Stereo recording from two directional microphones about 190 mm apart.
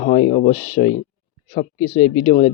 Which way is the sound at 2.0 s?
40° left (ahead or behind).